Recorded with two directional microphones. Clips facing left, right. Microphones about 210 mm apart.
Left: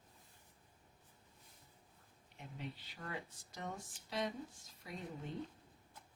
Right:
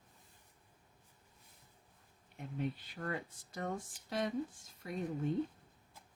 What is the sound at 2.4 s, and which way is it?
Speech, 50° right (ahead or behind).